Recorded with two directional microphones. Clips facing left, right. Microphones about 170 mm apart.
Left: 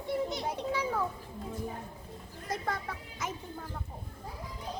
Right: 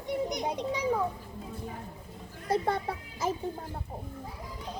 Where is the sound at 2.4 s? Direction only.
30° right (ahead or behind).